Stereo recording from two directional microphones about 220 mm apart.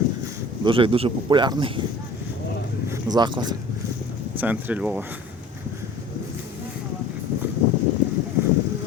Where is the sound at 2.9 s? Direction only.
20° right (ahead or behind).